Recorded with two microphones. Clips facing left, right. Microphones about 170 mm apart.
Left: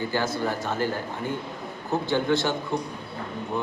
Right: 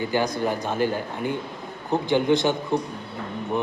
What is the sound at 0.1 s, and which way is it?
Speech, 15° right (ahead or behind).